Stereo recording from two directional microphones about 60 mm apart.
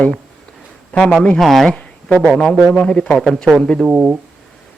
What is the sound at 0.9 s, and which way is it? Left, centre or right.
Speech, centre.